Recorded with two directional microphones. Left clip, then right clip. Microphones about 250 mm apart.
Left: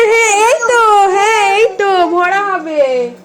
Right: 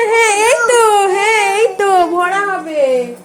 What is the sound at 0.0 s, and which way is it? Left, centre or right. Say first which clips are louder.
Whimper: left 2 dB; centre.